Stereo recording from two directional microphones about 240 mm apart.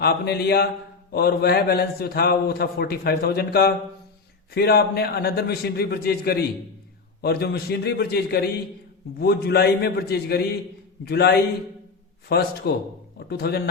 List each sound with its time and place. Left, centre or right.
0.0 s a man's voice: left